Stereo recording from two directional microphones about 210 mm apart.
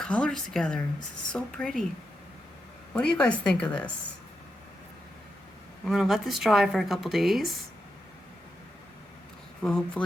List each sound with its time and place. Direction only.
0.0 s speech: 5° left (ahead or behind)
2.9 s speech: 5° left (ahead or behind)
5.8 s speech: centre (ahead or behind)
9.6 s speech: 5° left (ahead or behind)